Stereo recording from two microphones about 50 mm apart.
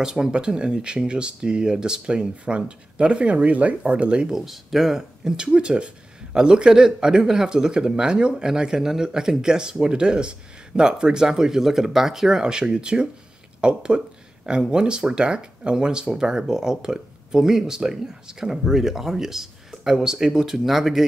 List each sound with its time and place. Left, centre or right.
0.0 s speech: centre
4.4 s speech: centre
13.6 s a sound: centre
14.6 s speech: centre